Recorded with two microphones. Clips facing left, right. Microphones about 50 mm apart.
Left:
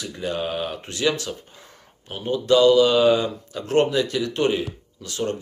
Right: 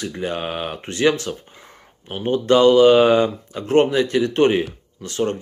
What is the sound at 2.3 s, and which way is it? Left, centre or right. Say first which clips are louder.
Speech: right 2 dB; right.